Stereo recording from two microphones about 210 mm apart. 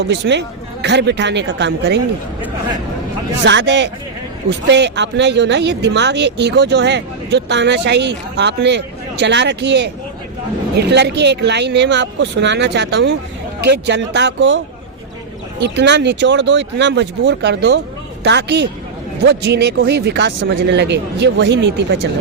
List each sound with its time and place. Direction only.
0.1 s speech: 55° right (ahead or behind)
3.4 s speech: 60° right (ahead or behind)
15.6 s speech: 55° right (ahead or behind)